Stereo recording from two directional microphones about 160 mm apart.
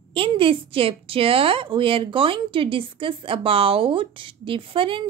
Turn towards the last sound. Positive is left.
turn(degrees=-35)  # may be behind; listen again after turning